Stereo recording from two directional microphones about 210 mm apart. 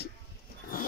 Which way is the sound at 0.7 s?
45° left (ahead or behind).